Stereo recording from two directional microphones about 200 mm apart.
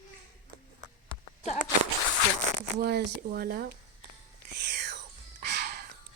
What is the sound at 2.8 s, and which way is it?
Speech, 55° right (ahead or behind).